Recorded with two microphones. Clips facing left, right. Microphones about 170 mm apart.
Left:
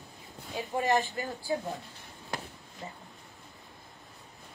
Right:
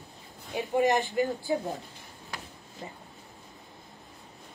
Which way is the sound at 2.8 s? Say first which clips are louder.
Right 1 dB; 20° right (ahead or behind).